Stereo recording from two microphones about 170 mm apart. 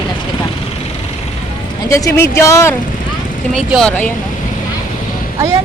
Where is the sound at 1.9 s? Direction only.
15° left (ahead or behind).